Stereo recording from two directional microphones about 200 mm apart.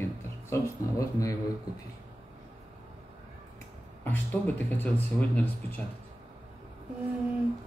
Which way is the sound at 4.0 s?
10° left (ahead or behind).